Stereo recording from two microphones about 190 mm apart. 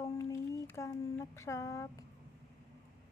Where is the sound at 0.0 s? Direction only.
15° left (ahead or behind).